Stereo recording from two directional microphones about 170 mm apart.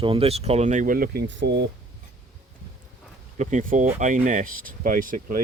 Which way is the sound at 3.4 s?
45° right (ahead or behind).